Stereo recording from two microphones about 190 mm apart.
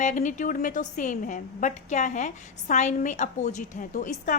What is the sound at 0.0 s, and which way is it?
A woman's voice, 40° left (ahead or behind).